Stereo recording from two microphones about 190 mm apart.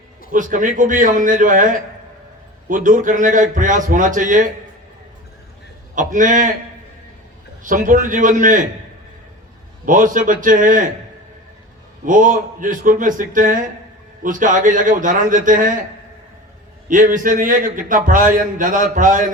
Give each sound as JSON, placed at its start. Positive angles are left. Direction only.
{"t": 0.3, "sound": "a man's voice", "side_deg": -45}
{"t": 5.9, "sound": "a man's voice", "side_deg": -45}
{"t": 7.6, "sound": "a man's voice", "side_deg": -45}
{"t": 9.8, "sound": "a man's voice", "side_deg": -45}
{"t": 12.0, "sound": "a man's voice", "side_deg": -45}
{"t": 16.9, "sound": "a man's voice", "side_deg": -45}